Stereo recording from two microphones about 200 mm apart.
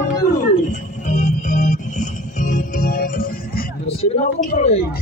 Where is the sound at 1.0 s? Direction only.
40° left (ahead or behind).